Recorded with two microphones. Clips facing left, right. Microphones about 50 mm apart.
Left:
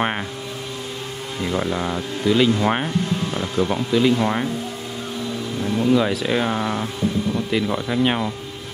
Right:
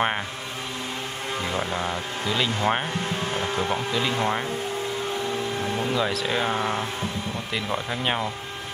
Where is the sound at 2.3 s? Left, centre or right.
Centre.